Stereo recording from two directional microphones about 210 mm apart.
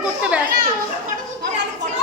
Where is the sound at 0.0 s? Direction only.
5° right (ahead or behind).